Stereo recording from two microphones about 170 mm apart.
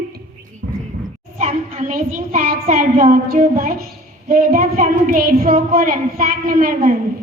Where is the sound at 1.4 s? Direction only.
50° right (ahead or behind).